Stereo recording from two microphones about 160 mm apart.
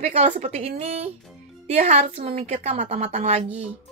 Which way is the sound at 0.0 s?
40° right (ahead or behind).